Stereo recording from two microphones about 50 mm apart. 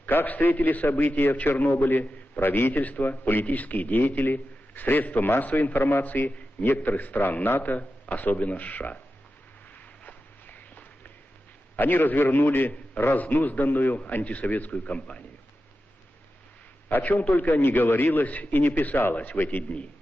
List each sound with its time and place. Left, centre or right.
0.0 s a man's voice: left
2.8 s a man's voice: left
7.6 s a man's voice: left
9.7 s walk: left
11.8 s a man's voice: left
16.9 s a man's voice: left
17.5 s a man's voice: left